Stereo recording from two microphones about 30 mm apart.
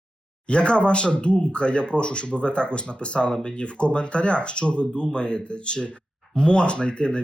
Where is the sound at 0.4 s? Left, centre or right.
Left.